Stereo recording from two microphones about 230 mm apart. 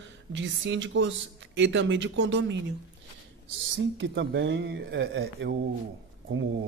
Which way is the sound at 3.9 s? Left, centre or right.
Right.